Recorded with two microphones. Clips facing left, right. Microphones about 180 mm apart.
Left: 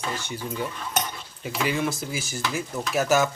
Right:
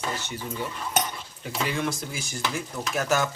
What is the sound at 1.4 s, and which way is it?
Stir, 5° left (ahead or behind).